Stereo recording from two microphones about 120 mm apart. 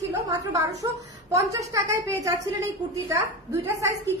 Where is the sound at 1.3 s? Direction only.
25° right (ahead or behind).